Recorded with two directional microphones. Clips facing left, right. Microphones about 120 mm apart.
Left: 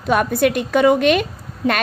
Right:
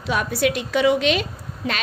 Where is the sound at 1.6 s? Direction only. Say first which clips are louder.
Left 8 dB; 35° left (ahead or behind).